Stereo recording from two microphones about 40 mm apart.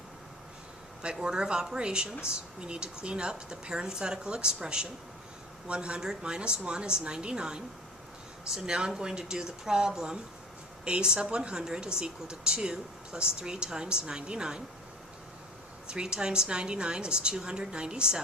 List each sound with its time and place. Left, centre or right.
1.1 s speech: centre
15.9 s speech: right